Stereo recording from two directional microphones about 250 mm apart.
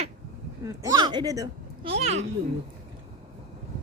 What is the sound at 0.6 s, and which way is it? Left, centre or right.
Speech, centre.